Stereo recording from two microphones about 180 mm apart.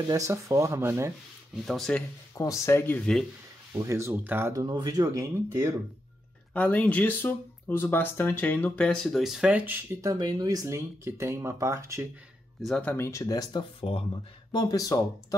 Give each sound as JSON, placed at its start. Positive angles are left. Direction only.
{"t": 0.1, "sound": "speech", "side_deg": -20}
{"t": 1.7, "sound": "speech", "side_deg": 5}
{"t": 2.3, "sound": "speech", "side_deg": 20}
{"t": 3.8, "sound": "speech", "side_deg": -15}
{"t": 6.5, "sound": "speech", "side_deg": 10}
{"t": 10.0, "sound": "speech", "side_deg": -20}
{"t": 12.6, "sound": "speech", "side_deg": 5}